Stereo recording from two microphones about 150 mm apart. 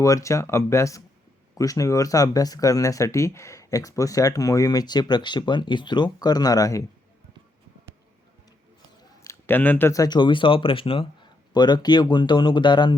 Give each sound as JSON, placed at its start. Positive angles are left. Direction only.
{"t": 0.0, "sound": "speech", "side_deg": 20}
{"t": 9.2, "sound": "speech", "side_deg": 15}